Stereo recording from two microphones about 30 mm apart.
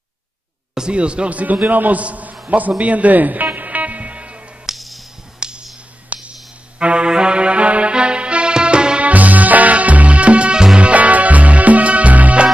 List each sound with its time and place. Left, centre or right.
0.9 s speech: right
1.3 s a man's voice: right
2.8 s a man's voice: right
3.5 s music: right
4.6 s music: centre
5.4 s music: right
6.1 s a sound: right
6.8 s music: right
9.0 s music: right